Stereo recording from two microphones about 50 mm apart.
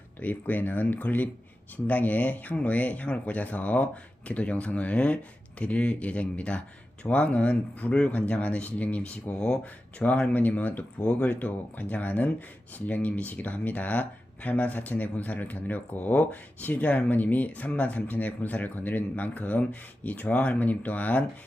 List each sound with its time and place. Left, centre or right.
0.2 s speech: left
11.0 s speech: left